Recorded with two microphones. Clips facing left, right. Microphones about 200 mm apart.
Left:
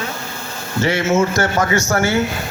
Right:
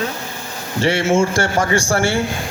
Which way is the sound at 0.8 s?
30° right (ahead or behind).